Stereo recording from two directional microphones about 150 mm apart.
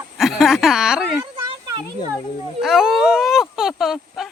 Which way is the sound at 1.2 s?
25° right (ahead or behind).